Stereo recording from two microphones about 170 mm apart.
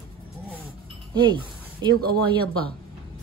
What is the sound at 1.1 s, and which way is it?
Speech, 25° right (ahead or behind).